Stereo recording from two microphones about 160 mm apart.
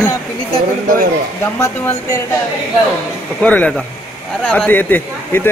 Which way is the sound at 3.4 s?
10° left (ahead or behind).